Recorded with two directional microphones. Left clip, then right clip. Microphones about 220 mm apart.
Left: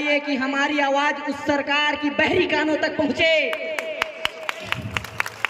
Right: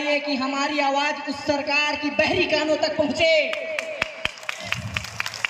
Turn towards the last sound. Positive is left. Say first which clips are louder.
# left 2 dB
turn(degrees=30)  # may be behind; listen again after turning